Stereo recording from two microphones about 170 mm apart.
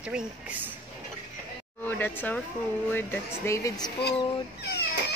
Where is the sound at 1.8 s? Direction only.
10° left (ahead or behind).